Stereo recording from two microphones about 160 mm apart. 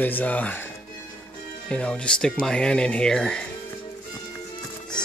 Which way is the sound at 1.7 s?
5° left (ahead or behind).